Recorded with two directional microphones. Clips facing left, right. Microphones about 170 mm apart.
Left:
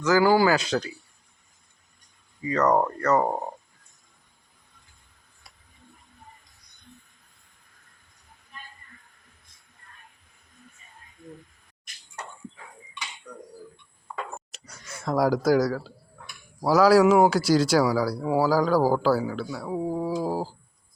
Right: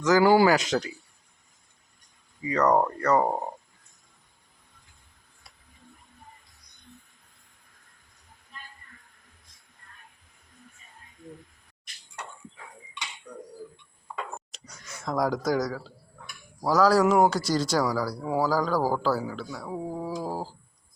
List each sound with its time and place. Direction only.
0.0 s speech: 20° right (ahead or behind)
2.4 s speech: 15° right (ahead or behind)
14.5 s a sound: 5° left (ahead or behind)
16.6 s speech: 5° left (ahead or behind)